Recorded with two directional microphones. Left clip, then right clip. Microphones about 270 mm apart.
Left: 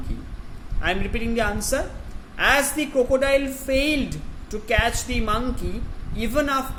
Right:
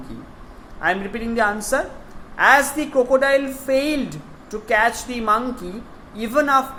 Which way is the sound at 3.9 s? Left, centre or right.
Centre.